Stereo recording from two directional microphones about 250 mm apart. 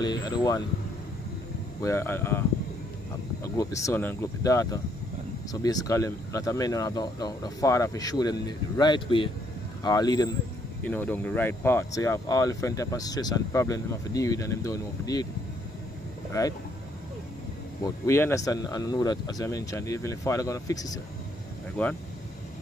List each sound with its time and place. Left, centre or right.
0.0 s speech: centre
1.8 s speech: centre
3.5 s speech: centre
16.3 s speech: centre
17.8 s speech: centre